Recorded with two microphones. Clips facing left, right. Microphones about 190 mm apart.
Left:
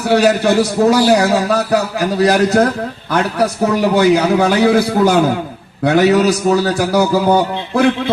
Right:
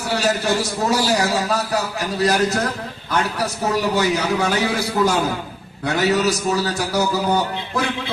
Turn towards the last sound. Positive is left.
turn(degrees=55)  # may be behind; listen again after turning